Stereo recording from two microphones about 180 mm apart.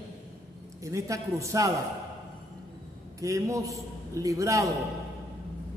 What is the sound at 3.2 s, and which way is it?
A man's voice, 15° right (ahead or behind).